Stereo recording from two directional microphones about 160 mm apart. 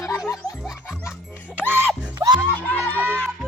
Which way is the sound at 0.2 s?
5° right (ahead or behind).